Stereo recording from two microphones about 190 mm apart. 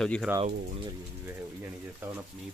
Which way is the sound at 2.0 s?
10° right (ahead or behind).